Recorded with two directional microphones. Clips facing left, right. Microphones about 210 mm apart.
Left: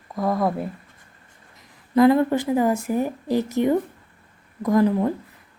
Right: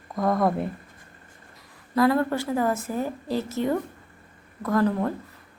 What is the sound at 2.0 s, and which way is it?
A woman's voice, 20° left (ahead or behind).